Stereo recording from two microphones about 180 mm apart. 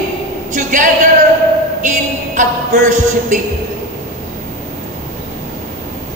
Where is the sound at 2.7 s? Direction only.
45° right (ahead or behind).